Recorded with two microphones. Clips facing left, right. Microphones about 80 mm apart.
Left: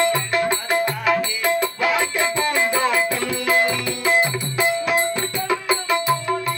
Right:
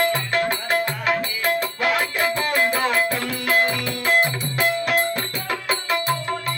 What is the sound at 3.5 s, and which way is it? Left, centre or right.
Music, centre.